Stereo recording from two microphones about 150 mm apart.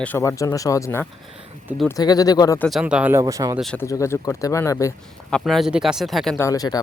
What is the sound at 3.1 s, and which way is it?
Speech, 20° right (ahead or behind).